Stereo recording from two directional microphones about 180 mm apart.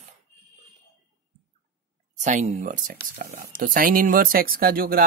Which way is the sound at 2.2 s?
45° right (ahead or behind).